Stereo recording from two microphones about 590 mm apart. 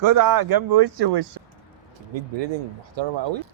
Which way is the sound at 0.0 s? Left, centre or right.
Right.